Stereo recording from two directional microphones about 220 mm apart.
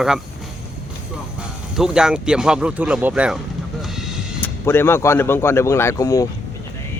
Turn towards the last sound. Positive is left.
turn(degrees=15)  # may be behind; listen again after turning